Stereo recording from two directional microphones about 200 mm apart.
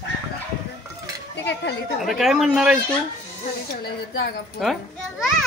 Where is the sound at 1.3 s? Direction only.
60° left (ahead or behind).